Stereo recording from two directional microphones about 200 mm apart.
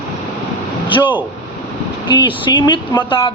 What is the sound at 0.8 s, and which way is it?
A woman's voice, 25° left (ahead or behind).